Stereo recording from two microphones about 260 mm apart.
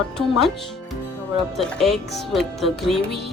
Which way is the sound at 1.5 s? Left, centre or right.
Centre.